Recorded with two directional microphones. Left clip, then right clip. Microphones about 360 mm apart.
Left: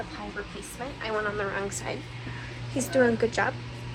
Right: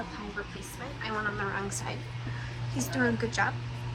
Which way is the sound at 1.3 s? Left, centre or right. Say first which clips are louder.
Left 3 dB; centre.